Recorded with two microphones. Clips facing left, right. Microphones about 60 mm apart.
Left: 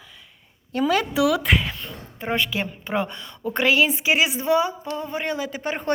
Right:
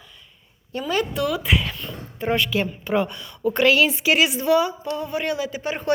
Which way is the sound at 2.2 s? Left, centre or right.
Left.